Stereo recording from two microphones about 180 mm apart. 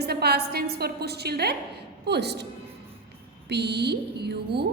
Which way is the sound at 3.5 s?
65° right (ahead or behind).